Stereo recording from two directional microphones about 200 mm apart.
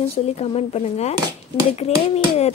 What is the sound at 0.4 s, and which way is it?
Speech, 30° left (ahead or behind).